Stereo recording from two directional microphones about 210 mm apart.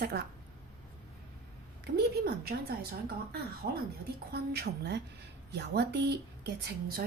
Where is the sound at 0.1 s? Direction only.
50° right (ahead or behind).